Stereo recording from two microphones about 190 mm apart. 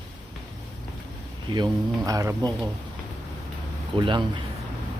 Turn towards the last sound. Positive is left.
turn(degrees=-25)  # may be behind; listen again after turning